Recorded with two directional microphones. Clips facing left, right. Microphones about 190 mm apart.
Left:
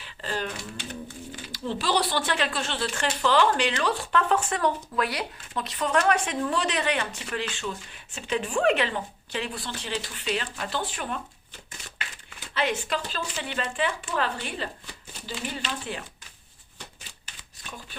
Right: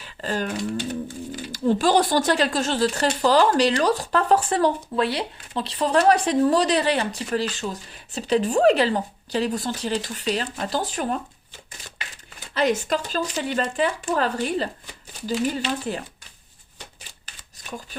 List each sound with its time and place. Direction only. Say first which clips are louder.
0.0 s speech: right 5 dB; 45° right (ahead or behind)
12.5 s speech: right 6 dB; 40° right (ahead or behind)
17.2 s shuffling cards: right 5 dB; 40° right (ahead or behind)